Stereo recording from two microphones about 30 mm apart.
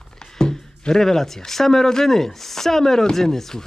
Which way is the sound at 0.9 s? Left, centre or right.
Centre.